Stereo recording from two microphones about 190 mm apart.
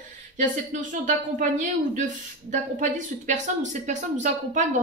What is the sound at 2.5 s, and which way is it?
Speech, 40° right (ahead or behind).